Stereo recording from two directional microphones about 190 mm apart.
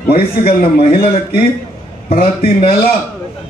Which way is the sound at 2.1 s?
50° left (ahead or behind).